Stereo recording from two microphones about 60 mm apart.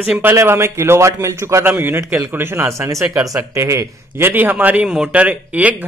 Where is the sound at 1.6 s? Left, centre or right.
Right.